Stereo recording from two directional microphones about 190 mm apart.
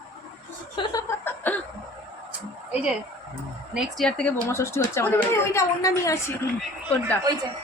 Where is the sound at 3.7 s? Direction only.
Centre (ahead or behind); by 6.2 s 15° left (ahead or behind).